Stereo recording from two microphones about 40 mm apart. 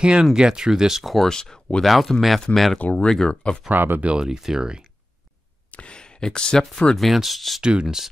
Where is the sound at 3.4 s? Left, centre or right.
Left.